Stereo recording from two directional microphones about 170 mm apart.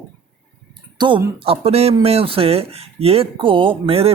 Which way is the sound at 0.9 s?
25° right (ahead or behind).